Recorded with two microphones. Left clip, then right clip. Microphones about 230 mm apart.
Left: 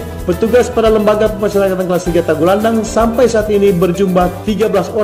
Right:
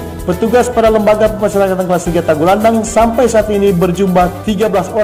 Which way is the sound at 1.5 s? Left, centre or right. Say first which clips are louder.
Right 1 dB; centre.